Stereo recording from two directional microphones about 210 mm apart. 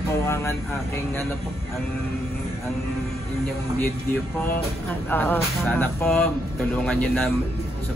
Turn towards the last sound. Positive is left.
turn(degrees=5)  # may be behind; listen again after turning